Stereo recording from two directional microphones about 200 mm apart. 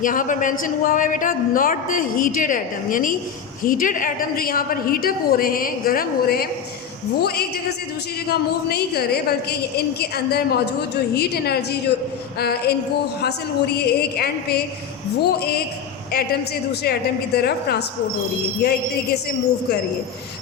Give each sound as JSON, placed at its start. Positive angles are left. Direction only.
{"t": 0.0, "sound": "a woman's voice", "side_deg": 40}
{"t": 16.8, "sound": "a woman's voice", "side_deg": 50}